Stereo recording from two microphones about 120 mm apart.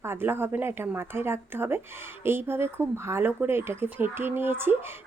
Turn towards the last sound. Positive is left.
turn(degrees=-20)  # may be behind; listen again after turning